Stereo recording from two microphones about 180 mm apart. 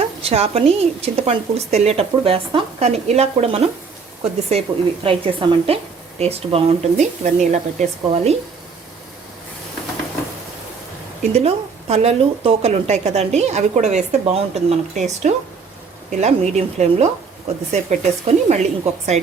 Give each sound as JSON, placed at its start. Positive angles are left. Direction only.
{"t": 0.2, "sound": "speech", "side_deg": -35}
{"t": 11.2, "sound": "speech", "side_deg": -35}